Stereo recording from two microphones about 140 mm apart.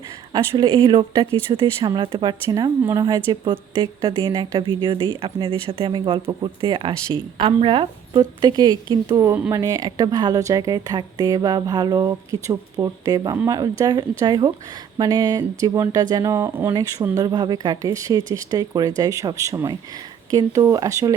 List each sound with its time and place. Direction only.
0.3 s speech: 35° right (ahead or behind); by 16.7 s 15° right (ahead or behind)
17.2 s speech: 30° right (ahead or behind)